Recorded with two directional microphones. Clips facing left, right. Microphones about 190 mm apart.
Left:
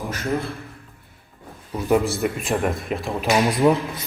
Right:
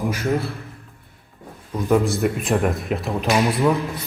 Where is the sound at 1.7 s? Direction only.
5° left (ahead or behind).